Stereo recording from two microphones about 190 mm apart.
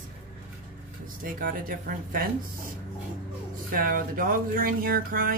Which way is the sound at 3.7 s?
50° right (ahead or behind).